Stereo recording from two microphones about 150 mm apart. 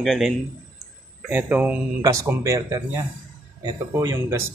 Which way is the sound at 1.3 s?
10° right (ahead or behind).